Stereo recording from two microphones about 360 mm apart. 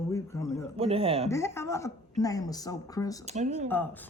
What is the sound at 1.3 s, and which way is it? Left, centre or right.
A woman's voice, centre.